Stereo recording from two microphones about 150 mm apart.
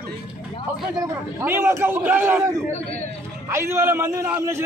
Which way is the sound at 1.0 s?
15° right (ahead or behind).